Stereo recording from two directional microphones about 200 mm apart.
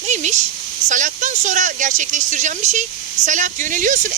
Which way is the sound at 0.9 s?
40° right (ahead or behind).